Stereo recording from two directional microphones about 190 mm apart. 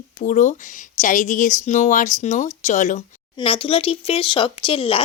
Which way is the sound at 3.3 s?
30° left (ahead or behind).